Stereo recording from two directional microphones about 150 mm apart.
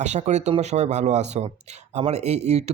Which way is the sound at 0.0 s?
50° right (ahead or behind).